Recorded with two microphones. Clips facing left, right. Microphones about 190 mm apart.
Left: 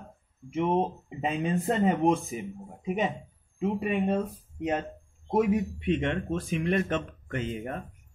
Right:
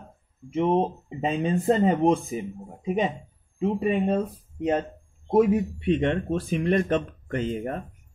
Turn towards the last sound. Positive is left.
turn(degrees=-35)  # may be behind; listen again after turning